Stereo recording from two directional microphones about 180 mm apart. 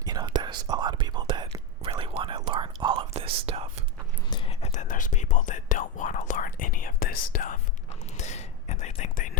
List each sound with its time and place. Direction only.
0.0 s whispering: 20° right (ahead or behind)
4.3 s whispering: 30° left (ahead or behind)
4.7 s whispering: 45° left (ahead or behind)
8.1 s whispering: 40° left (ahead or behind)